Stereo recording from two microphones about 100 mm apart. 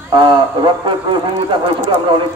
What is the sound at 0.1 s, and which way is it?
A man's voice, 50° right (ahead or behind).